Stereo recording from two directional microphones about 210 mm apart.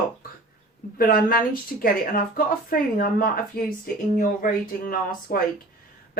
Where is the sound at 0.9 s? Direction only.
45° left (ahead or behind).